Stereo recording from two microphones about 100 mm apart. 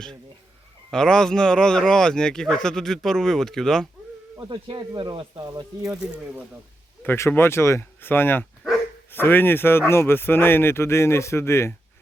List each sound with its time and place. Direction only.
0.9 s speech: 5° left (ahead or behind)
4.4 s speech: 55° right (ahead or behind)
7.0 s speech: 20° left (ahead or behind)